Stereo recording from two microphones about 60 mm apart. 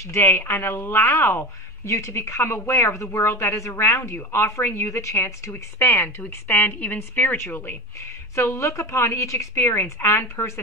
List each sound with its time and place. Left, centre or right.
0.1 s a woman's voice: left
6.5 s a woman's voice: left
7.3 s a woman's voice: left